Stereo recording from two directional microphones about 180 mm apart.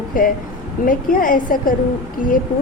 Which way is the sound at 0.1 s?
50° left (ahead or behind).